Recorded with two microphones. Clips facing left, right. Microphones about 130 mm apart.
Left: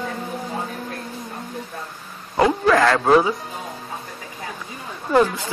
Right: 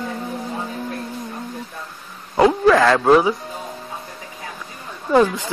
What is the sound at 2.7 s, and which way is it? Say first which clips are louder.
Speech: right 1 dB; centre (ahead or behind).